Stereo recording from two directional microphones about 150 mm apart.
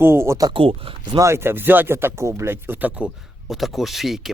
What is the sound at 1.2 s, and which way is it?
Speech, 15° right (ahead or behind).